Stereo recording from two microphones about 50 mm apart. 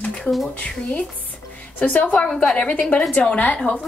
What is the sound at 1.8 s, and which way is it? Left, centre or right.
Speech, left.